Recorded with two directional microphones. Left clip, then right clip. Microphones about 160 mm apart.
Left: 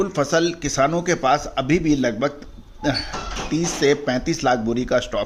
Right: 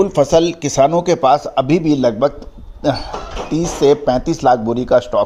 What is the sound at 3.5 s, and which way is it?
Speech, 15° right (ahead or behind).